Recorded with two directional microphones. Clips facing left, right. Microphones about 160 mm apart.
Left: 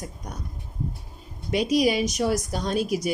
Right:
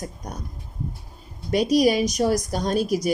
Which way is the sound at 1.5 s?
40° right (ahead or behind).